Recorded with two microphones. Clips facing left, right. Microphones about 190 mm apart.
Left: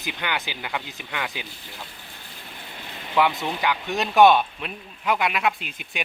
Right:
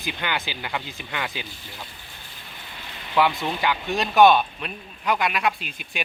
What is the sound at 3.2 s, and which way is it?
Speech, 15° left (ahead or behind).